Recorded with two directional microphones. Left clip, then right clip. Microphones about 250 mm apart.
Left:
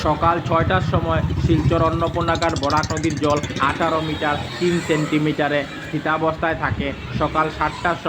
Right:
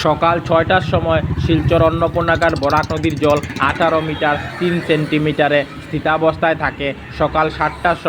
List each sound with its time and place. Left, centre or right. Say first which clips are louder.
0.0 s speech: right 4 dB; centre